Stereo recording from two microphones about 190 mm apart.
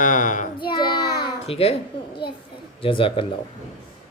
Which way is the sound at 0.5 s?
25° left (ahead or behind).